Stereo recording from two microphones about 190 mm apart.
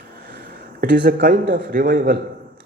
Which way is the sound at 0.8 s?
50° right (ahead or behind).